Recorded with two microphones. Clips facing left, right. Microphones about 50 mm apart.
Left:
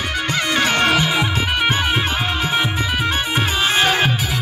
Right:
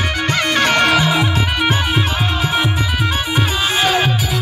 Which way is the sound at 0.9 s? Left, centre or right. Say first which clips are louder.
Right 3 dB; centre.